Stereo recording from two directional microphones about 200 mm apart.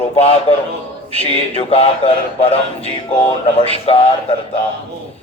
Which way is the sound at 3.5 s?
30° left (ahead or behind).